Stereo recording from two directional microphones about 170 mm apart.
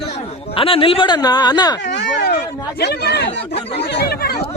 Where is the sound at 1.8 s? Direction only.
90° left.